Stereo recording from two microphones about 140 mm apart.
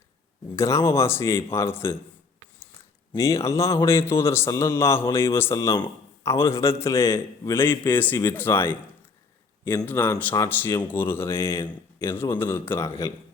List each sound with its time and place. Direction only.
0.5 s speech: 20° left (ahead or behind)
3.1 s a man's voice: 20° left (ahead or behind)